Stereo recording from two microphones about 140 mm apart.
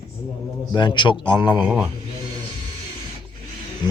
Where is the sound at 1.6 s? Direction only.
10° right (ahead or behind).